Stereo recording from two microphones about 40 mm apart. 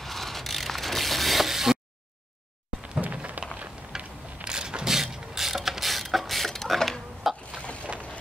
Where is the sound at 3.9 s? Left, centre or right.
Centre.